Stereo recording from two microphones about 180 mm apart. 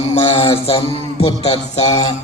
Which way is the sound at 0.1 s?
30° left (ahead or behind).